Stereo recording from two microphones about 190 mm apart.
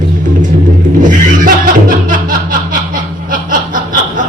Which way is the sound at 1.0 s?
45° right (ahead or behind).